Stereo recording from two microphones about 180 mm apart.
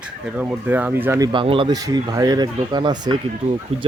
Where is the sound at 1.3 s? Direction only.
30° right (ahead or behind).